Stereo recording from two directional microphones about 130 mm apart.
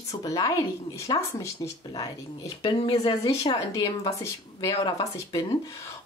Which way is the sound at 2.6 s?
40° left (ahead or behind).